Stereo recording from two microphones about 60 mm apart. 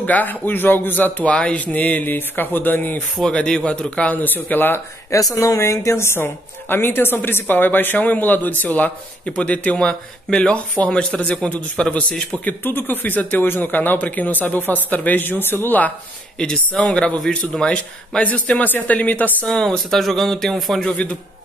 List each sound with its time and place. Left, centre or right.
0.0 s a woman's voice: left
1.2 s speech: centre
3.3 s speech: centre
4.1 s a woman's voice: left
5.3 s a woman's voice: left; by 12.2 s centre
12.4 s a woman's voice: left
16.3 s speech: centre; by 19.5 s left
19.5 s speech: centre
20.9 s speech: left